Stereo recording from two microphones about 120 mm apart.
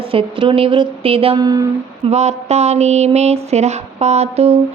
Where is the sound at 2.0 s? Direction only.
65° right (ahead or behind).